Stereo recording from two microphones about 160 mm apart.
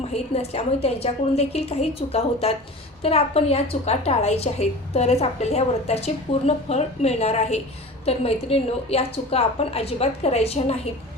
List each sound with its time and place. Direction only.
0.1 s a woman's voice: 40° left (ahead or behind)